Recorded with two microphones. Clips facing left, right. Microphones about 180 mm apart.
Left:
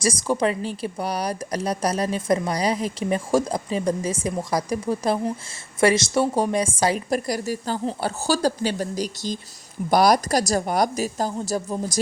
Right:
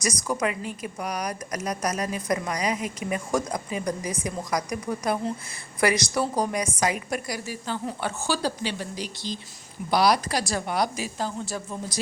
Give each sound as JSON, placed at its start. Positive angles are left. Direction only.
{"t": 0.0, "sound": "a woman's voice", "side_deg": 30}